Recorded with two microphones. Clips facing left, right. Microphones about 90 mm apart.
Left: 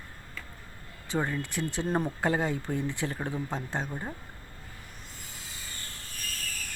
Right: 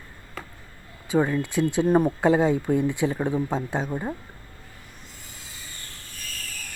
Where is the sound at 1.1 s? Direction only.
15° right (ahead or behind).